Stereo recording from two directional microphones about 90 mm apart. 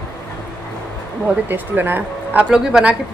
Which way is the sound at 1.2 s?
20° right (ahead or behind).